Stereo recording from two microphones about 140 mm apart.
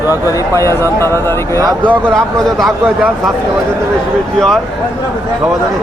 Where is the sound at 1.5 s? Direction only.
25° right (ahead or behind).